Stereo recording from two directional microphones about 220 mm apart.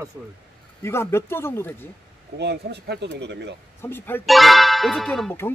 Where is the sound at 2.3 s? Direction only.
50° right (ahead or behind).